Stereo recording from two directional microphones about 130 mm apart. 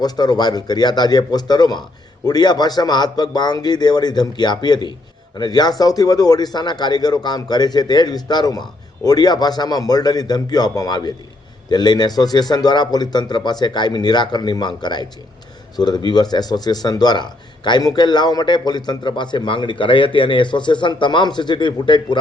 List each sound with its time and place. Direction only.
0.0 s speech: 30° left (ahead or behind)